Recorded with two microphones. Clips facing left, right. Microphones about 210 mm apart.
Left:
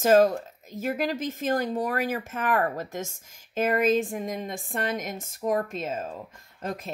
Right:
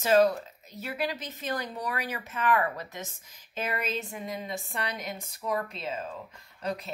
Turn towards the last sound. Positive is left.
turn(degrees=45)  # may be behind; listen again after turning